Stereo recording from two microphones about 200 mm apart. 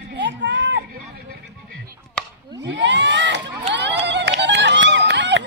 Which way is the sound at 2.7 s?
65° right (ahead or behind).